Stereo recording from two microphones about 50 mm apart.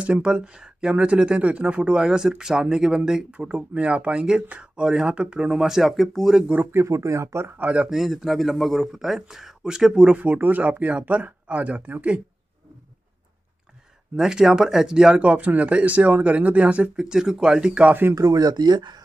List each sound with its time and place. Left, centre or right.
0.0 s speech: centre
3.3 s speech: right
5.5 s speech: centre
6.8 s speech: right
7.4 s speech: right
7.9 s a man's voice: centre
10.2 s speech: right
14.1 s speech: centre
15.2 s speech: right
16.9 s speech: centre
18.2 s speech: right